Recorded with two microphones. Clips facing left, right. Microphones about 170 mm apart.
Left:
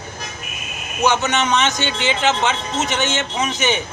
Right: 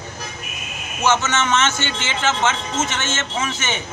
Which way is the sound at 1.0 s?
15° left (ahead or behind).